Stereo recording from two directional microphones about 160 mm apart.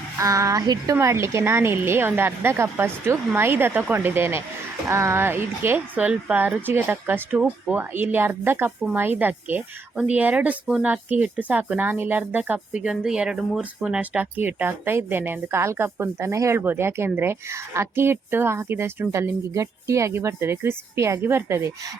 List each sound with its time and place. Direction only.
0.2 s a woman's voice: 20° right (ahead or behind)